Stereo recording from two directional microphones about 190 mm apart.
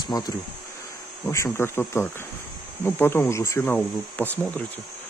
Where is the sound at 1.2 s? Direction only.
15° left (ahead or behind).